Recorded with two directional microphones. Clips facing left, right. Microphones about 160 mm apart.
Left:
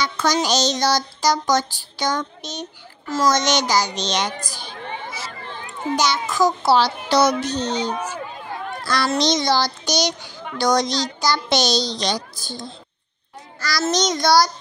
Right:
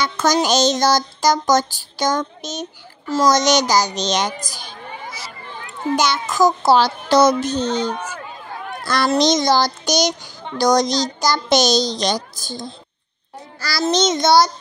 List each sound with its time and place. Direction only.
0.0 s child singing: 45° right (ahead or behind)
3.1 s a child's voice: 35° right (ahead or behind)
5.9 s child singing: 50° right (ahead or behind)
8.8 s a child's voice: 50° right (ahead or behind)
9.2 s child singing: 45° right (ahead or behind)
10.4 s child singing: 35° right (ahead or behind)
13.6 s a child's voice: 30° right (ahead or behind)